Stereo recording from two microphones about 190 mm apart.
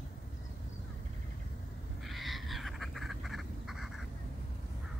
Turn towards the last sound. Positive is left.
turn(degrees=0)  # may be behind; listen again after turning